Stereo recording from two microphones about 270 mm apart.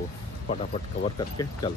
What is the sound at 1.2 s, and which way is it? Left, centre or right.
Speech, centre.